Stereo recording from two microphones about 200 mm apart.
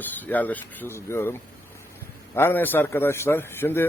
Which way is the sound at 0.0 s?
10° left (ahead or behind).